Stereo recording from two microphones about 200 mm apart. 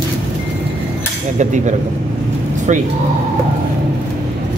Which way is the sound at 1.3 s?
35° right (ahead or behind).